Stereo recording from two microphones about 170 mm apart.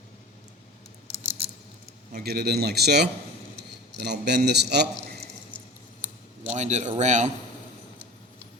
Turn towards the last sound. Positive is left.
turn(degrees=-45)  # may be behind; listen again after turning